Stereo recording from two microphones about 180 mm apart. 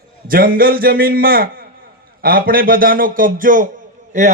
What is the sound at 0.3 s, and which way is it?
A man's voice, 55° right (ahead or behind).